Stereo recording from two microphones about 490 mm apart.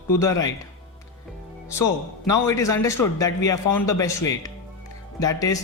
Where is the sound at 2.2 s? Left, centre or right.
Centre.